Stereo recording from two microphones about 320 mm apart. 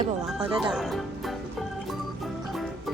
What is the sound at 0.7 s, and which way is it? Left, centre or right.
Speech, centre.